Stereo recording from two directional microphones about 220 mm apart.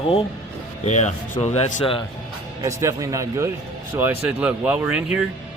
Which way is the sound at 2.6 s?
15° right (ahead or behind).